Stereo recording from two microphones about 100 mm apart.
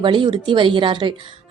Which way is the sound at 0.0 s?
55° right (ahead or behind).